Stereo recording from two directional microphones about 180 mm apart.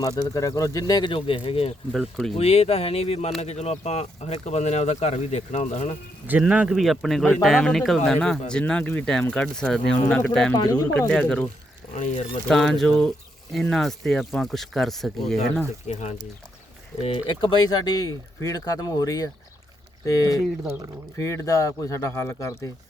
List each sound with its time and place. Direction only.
0.0 s speech: 20° left (ahead or behind)
1.9 s speech: 5° left (ahead or behind)
2.3 s speech: 35° left (ahead or behind)
6.2 s speech: 10° right (ahead or behind)
10.5 s speech: 20° left (ahead or behind)
11.1 s speech: 5° left (ahead or behind)
12.5 s speech: centre (ahead or behind)
15.9 s speech: 40° left (ahead or behind)
17.2 s speech: 25° left (ahead or behind)